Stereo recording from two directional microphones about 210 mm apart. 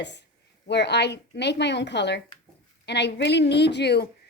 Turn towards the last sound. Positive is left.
turn(degrees=50)  # may be behind; listen again after turning